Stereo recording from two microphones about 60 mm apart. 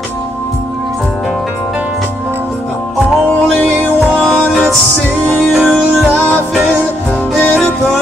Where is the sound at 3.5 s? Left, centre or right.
Centre.